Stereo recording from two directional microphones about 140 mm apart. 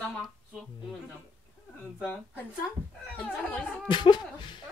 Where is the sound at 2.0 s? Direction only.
15° left (ahead or behind).